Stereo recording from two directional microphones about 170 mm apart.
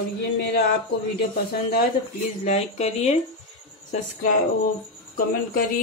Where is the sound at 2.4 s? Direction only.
40° left (ahead or behind).